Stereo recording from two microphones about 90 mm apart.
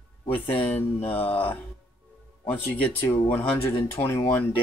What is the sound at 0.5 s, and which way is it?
Speech, 20° left (ahead or behind).